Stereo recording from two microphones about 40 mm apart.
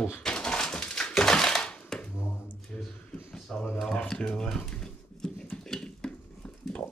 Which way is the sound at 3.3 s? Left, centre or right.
Centre.